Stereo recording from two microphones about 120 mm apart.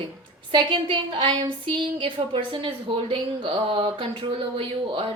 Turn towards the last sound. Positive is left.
turn(degrees=-45)  # may be behind; listen again after turning